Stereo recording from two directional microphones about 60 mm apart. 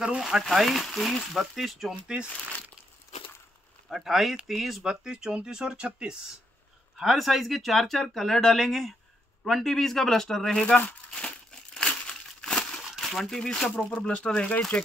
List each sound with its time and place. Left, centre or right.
0.0 s speech: centre
3.9 s speech: centre
7.0 s speech: centre
11.1 s crumpling: centre
11.9 s a sound: centre
12.8 s speech: centre